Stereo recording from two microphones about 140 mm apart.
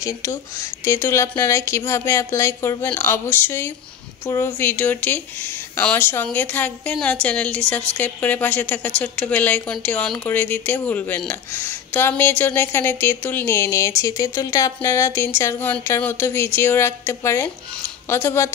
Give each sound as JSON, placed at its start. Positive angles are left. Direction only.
{"t": 0.0, "sound": "a woman's voice", "side_deg": 25}